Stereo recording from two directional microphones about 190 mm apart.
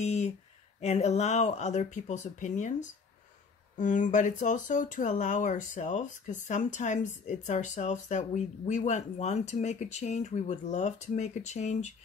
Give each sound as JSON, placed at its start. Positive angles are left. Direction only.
{"t": 0.0, "sound": "speech", "side_deg": 35}
{"t": 3.7, "sound": "speech", "side_deg": 40}